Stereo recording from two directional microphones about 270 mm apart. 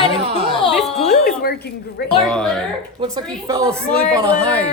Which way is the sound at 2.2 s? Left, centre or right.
Centre.